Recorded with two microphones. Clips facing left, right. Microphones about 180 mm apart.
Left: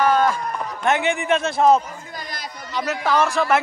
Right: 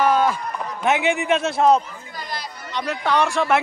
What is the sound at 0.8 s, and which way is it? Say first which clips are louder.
A man's voice: right 1 dB; 5° right (ahead or behind).